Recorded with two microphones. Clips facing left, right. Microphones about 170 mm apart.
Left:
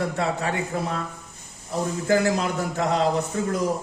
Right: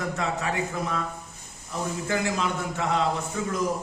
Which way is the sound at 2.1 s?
35° left (ahead or behind).